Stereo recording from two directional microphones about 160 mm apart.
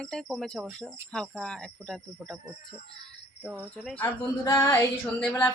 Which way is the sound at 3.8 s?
10° left (ahead or behind).